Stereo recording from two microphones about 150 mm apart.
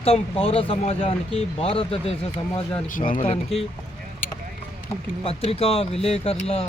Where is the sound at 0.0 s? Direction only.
40° left (ahead or behind).